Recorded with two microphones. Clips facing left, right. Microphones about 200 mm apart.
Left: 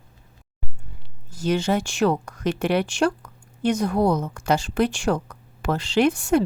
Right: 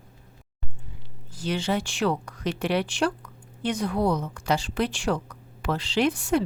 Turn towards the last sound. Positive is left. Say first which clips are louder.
# left 4 dB
turn(degrees=45)  # may be behind; listen again after turning